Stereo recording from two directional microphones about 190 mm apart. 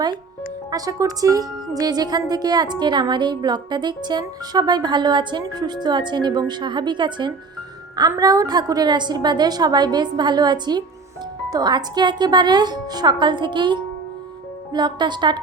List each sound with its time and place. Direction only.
0.7 s a woman's voice: 20° right (ahead or behind)